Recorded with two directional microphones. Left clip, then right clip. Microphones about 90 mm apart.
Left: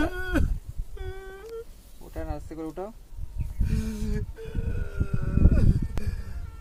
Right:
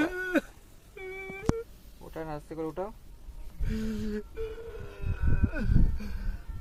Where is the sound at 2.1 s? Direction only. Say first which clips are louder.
Left 1 dB; 5° left (ahead or behind).